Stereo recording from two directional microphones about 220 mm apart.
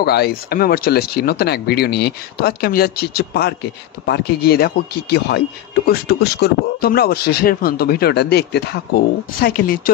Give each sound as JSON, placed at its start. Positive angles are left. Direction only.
{"t": 0.0, "sound": "speech", "side_deg": 45}